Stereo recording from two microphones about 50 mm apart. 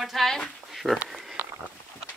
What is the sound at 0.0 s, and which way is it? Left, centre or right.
Speech, centre.